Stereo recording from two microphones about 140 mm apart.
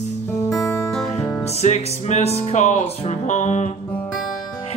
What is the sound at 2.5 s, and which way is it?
Speech, 55° left (ahead or behind).